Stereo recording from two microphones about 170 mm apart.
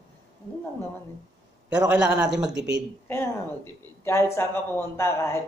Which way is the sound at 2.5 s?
90° right.